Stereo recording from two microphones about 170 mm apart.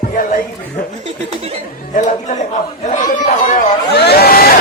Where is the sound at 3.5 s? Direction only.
70° left (ahead or behind).